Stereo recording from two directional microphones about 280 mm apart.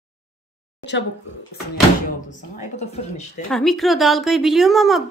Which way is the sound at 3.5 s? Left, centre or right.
Centre.